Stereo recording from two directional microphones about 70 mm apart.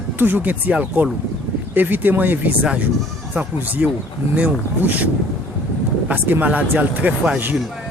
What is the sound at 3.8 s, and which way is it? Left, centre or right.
Speech, centre.